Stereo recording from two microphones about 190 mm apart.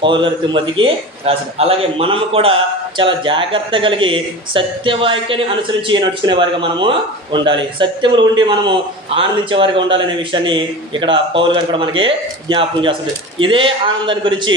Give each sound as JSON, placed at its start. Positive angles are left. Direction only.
{"t": 0.0, "sound": "a man's voice", "side_deg": -25}